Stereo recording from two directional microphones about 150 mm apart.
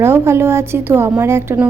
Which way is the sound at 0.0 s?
15° right (ahead or behind).